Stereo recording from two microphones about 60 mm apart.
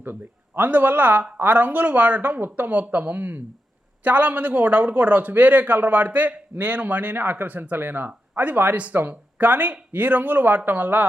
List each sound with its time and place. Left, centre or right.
0.0 s a man's voice: right